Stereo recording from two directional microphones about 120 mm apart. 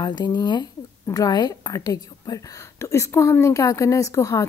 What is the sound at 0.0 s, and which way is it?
Speech, 35° left (ahead or behind).